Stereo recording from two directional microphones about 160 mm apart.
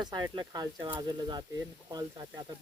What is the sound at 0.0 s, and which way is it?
Speech, 25° right (ahead or behind).